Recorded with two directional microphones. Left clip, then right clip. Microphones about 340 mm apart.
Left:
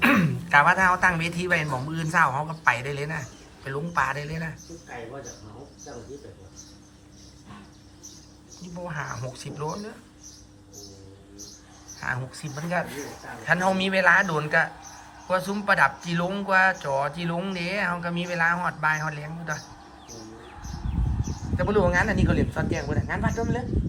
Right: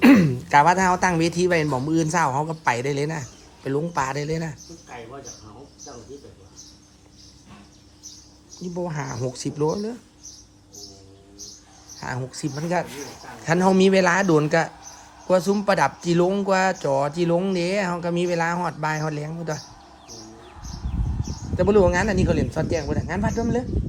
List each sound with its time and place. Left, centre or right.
0.0 s speech: centre
8.8 s speech: right
11.9 s speech: centre
13.4 s speech: right
21.6 s speech: right